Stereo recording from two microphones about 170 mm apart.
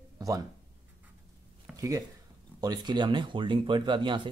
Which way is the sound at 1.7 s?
20° right (ahead or behind).